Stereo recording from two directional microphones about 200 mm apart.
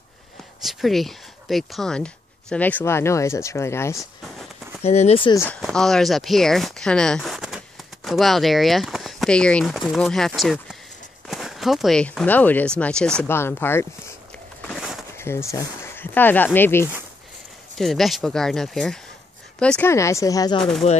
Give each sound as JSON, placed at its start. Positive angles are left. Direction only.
{"t": 0.6, "sound": "speech", "side_deg": 0}
{"t": 4.0, "sound": "a sound", "side_deg": 0}
{"t": 4.8, "sound": "speech", "side_deg": 30}
{"t": 5.3, "sound": "speech", "side_deg": 10}
{"t": 14.6, "sound": "a sound", "side_deg": 0}
{"t": 15.1, "sound": "speech", "side_deg": 15}
{"t": 20.8, "sound": "speech", "side_deg": 35}